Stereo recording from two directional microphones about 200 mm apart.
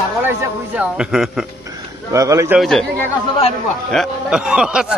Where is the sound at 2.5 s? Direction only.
5° left (ahead or behind).